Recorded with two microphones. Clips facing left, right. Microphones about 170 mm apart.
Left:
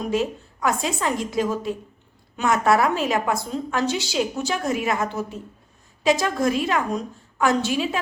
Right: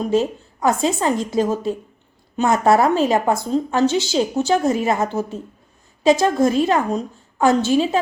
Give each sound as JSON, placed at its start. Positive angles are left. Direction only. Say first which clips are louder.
{"t": 0.1, "sound": "a woman's voice", "louder": "right 5 dB", "side_deg": -30}